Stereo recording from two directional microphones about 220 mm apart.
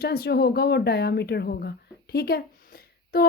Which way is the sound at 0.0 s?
45° left (ahead or behind).